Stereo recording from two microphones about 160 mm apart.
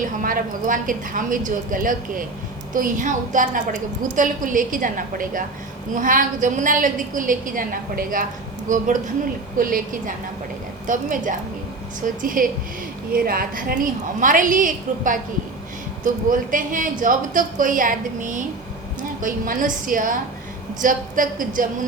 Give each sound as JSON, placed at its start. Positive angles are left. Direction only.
{"t": 0.2, "sound": "a woman's voice", "side_deg": -60}